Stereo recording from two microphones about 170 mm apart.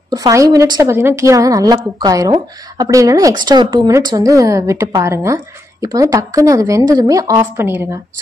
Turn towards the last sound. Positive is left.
turn(degrees=-15)  # may be behind; listen again after turning